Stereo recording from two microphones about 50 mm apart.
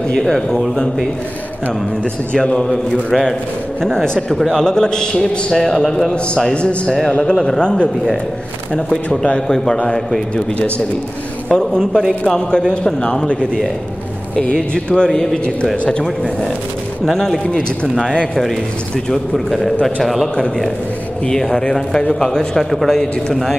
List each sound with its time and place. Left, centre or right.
0.1 s a man's voice: centre
2.3 s a man's voice: centre
11.4 s a man's voice: centre
19.3 s a man's voice: centre